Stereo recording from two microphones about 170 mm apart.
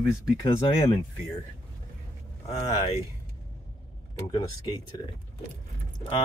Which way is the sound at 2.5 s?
40° left (ahead or behind).